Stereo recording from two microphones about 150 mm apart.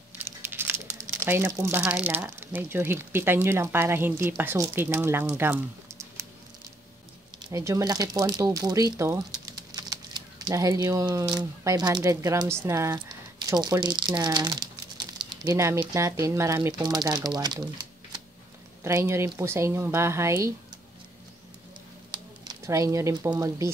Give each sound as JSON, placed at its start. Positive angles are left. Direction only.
{"t": 0.2, "sound": "crumpling", "side_deg": -15}
{"t": 1.2, "sound": "speech", "side_deg": -15}
{"t": 7.4, "sound": "speech", "side_deg": -20}
{"t": 22.1, "sound": "speech", "side_deg": -25}